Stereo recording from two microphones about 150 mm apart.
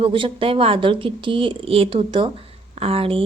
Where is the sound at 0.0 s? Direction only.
35° right (ahead or behind).